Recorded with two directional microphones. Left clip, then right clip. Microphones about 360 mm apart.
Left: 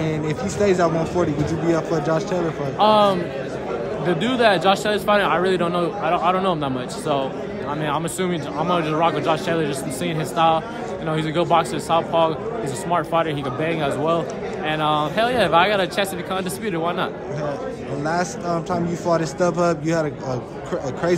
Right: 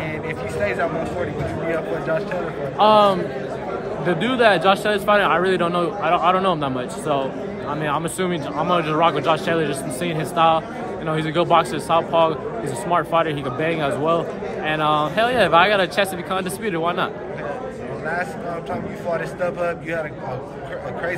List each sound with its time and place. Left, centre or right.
2.8 s a man's voice: centre
18.7 s a man's voice: centre